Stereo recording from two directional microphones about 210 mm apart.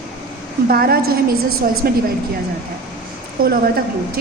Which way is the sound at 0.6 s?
45° right (ahead or behind).